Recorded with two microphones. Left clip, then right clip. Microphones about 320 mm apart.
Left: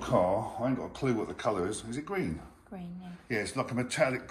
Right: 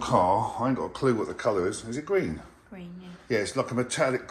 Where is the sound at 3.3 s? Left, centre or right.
Centre.